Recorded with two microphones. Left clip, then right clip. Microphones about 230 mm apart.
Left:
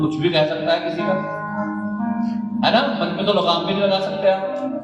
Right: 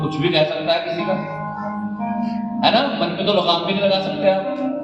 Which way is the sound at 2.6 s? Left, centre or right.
Left.